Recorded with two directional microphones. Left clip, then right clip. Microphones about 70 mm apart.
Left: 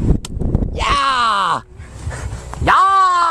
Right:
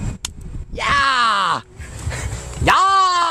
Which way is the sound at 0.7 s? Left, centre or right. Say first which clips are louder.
Even; left.